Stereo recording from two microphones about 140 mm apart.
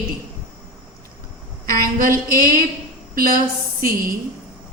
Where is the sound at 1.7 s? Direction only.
90° right.